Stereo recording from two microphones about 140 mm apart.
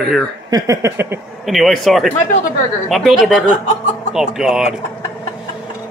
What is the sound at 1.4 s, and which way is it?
A man's voice, centre (ahead or behind).